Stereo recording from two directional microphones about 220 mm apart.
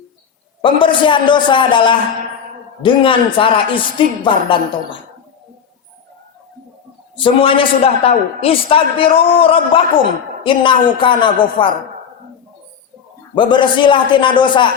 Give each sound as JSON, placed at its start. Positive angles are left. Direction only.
{"t": 0.6, "sound": "a man's voice", "side_deg": 20}
{"t": 7.2, "sound": "a man's voice", "side_deg": 25}
{"t": 13.3, "sound": "a man's voice", "side_deg": 20}